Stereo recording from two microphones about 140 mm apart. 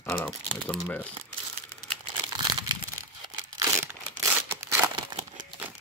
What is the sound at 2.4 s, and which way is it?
Crumpling, 30° right (ahead or behind).